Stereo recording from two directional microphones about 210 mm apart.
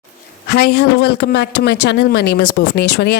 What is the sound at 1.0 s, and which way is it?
Speech, 55° left (ahead or behind).